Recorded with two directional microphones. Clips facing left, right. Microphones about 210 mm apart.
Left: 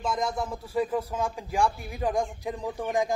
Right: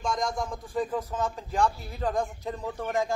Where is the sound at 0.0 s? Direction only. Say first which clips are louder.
Left 1 dB; 5° left (ahead or behind).